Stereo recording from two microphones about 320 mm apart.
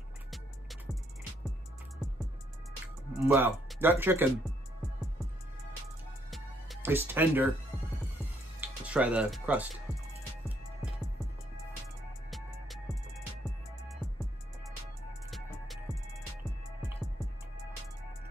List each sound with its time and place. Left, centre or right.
3.3 s speech: centre
6.3 s music: centre
8.5 s music: centre
12.3 s music: centre
15.9 s music: centre